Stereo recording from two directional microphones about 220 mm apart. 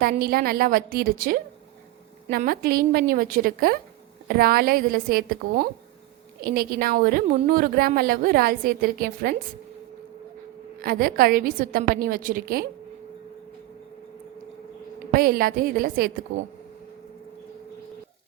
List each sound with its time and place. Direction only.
0.0 s a woman's voice: 40° right (ahead or behind)
10.8 s a woman's voice: 45° right (ahead or behind)
15.1 s a woman's voice: 40° right (ahead or behind)